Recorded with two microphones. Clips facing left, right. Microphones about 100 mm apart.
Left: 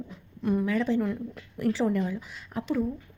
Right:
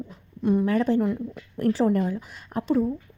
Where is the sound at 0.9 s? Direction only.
50° right (ahead or behind).